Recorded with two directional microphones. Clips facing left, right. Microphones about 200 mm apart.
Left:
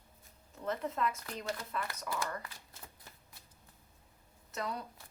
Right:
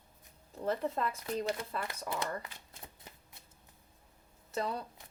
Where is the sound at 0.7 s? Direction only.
30° right (ahead or behind).